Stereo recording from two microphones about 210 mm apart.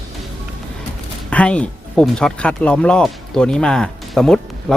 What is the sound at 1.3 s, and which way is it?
Speech, 5° left (ahead or behind).